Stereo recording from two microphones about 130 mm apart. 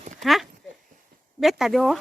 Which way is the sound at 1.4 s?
Centre (ahead or behind).